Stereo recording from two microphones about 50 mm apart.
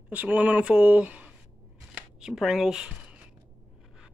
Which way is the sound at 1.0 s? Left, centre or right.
Right.